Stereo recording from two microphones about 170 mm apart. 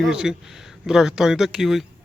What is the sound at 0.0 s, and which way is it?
Speech, 5° right (ahead or behind).